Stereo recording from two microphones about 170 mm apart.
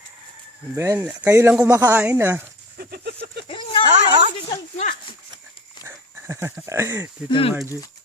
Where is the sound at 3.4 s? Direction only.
30° left (ahead or behind).